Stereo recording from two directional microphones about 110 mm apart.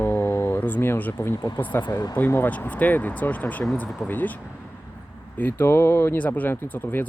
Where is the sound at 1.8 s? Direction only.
35° left (ahead or behind).